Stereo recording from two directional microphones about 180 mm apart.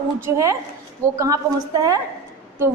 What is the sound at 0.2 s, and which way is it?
A woman's voice, 15° right (ahead or behind).